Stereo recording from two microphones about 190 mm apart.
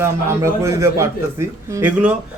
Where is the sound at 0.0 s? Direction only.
15° right (ahead or behind).